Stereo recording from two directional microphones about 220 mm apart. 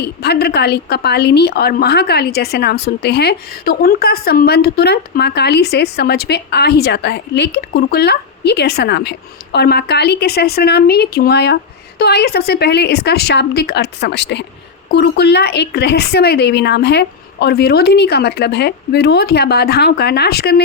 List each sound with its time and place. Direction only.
0.0 s a woman's voice: 45° left (ahead or behind)